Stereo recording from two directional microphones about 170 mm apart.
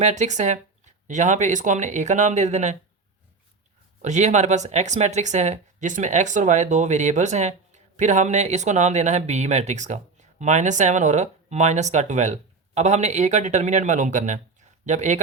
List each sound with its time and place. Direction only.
0.0 s speech: 45° right (ahead or behind)
4.0 s speech: 45° right (ahead or behind)